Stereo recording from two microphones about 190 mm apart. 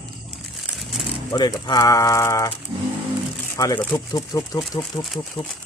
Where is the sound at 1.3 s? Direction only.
20° left (ahead or behind).